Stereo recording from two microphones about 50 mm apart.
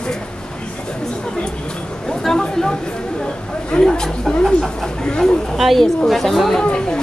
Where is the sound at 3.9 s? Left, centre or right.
Centre.